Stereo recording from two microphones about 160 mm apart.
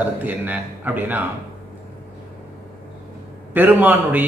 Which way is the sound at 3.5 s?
10° right (ahead or behind).